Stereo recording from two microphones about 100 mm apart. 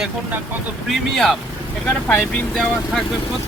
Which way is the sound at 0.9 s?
Centre (ahead or behind).